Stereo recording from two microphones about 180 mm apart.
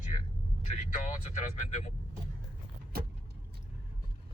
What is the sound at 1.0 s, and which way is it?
Speech, 40° left (ahead or behind).